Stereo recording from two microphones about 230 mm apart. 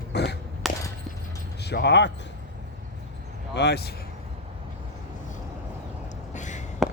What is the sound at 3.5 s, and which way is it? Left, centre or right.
Speech, left.